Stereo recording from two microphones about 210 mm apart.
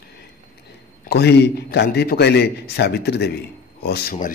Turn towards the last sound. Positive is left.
turn(degrees=45)  # may be behind; listen again after turning